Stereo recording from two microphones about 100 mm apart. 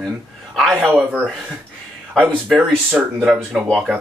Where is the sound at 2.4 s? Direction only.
Centre (ahead or behind).